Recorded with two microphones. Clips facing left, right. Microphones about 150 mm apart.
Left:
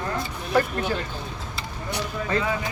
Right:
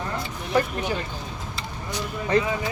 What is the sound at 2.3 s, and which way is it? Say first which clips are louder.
Speech: right 4 dB; 20° right (ahead or behind).